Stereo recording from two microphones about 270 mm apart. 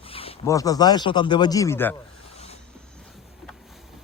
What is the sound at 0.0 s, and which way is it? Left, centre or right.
Speech, left.